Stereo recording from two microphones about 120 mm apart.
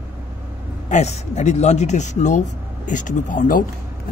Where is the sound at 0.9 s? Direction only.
75° left (ahead or behind); by 3.5 s 90° left.